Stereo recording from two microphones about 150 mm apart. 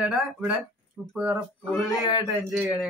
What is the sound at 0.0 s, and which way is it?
Speech, 5° right (ahead or behind).